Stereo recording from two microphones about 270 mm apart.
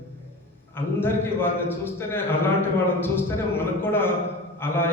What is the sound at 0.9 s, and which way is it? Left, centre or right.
A man's voice, centre.